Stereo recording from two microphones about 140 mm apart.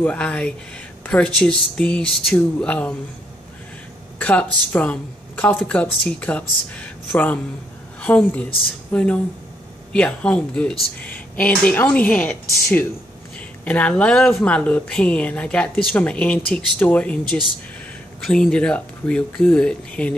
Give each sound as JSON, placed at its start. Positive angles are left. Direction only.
{"t": 0.0, "sound": "speech", "side_deg": 10}
{"t": 4.2, "sound": "speech", "side_deg": 10}
{"t": 8.0, "sound": "speech", "side_deg": 10}